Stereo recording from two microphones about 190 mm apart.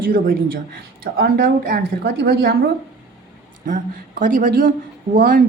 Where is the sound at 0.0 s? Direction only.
50° right (ahead or behind).